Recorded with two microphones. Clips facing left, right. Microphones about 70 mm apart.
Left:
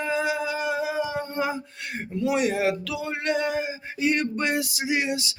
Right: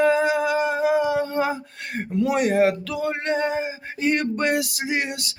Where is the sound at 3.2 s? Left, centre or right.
Right.